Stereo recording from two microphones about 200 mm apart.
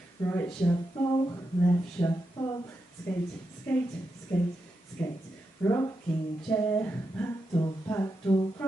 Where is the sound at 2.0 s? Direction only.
15° left (ahead or behind).